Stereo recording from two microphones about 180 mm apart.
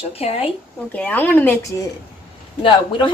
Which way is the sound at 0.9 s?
10° left (ahead or behind).